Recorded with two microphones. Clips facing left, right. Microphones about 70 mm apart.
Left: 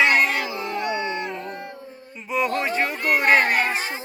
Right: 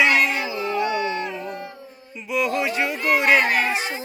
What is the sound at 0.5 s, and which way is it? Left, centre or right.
Dog, left.